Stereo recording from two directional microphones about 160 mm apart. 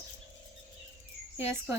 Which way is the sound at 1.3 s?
15° right (ahead or behind).